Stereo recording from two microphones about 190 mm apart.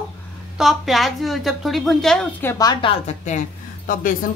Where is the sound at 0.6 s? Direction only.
Centre (ahead or behind).